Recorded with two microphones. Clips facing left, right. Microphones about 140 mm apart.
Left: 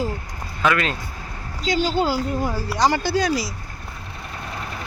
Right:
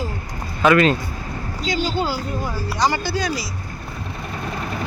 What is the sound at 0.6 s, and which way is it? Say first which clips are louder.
Speech: right 6 dB; centre (ahead or behind).